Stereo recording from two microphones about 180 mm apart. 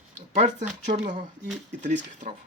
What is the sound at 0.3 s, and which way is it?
Speech, 40° right (ahead or behind).